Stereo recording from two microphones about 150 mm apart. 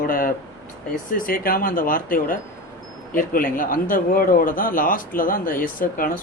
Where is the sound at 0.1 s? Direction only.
70° left (ahead or behind).